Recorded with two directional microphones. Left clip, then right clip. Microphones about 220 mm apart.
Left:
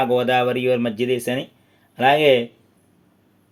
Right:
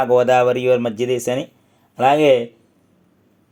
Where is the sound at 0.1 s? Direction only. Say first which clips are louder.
Right 5 dB; 20° right (ahead or behind).